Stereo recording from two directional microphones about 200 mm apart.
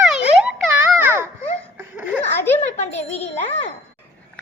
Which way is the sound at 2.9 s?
10° left (ahead or behind).